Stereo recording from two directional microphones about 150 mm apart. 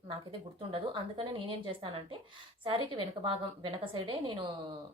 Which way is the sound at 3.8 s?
35° right (ahead or behind).